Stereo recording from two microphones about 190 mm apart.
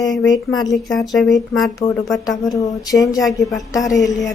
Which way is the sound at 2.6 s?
20° left (ahead or behind).